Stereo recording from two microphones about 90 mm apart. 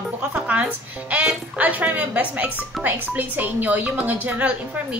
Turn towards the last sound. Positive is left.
turn(degrees=-15)  # may be behind; listen again after turning